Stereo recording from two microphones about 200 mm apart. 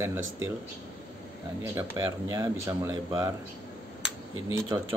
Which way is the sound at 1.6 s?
15° right (ahead or behind).